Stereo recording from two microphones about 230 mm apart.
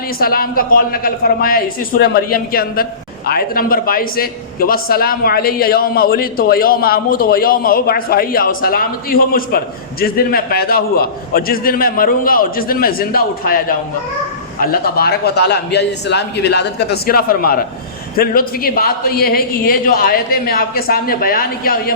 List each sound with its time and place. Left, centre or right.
0.2 s a man's voice: left